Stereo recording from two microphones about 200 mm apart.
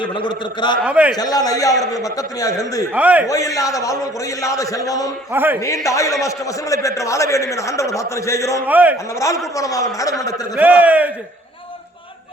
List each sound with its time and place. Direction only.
0.0 s a man's voice: 25° left (ahead or behind)
0.9 s a man's voice: 5° right (ahead or behind)
1.1 s a man's voice: 20° left (ahead or behind)
2.9 s a man's voice: 5° right (ahead or behind)
3.2 s a man's voice: 15° left (ahead or behind)
5.3 s a man's voice: 10° right (ahead or behind)
5.5 s a man's voice: 15° left (ahead or behind)
8.6 s a man's voice: 10° right (ahead or behind)
9.1 s a man's voice: 15° left (ahead or behind)
10.5 s a man's voice: 10° right (ahead or behind)